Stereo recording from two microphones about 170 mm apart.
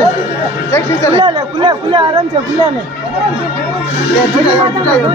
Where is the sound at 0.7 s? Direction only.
15° left (ahead or behind).